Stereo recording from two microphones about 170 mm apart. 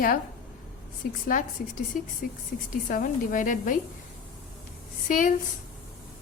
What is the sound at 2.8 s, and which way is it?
Speech, 55° left (ahead or behind).